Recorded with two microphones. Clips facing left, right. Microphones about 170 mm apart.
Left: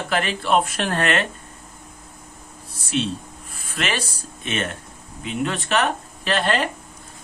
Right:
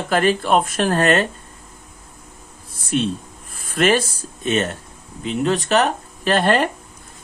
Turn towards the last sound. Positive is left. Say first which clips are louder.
# right 5 dB
turn(degrees=-45)  # may be behind; listen again after turning